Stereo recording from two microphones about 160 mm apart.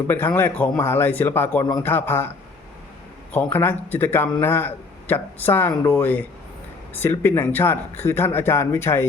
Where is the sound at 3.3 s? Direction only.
15° left (ahead or behind).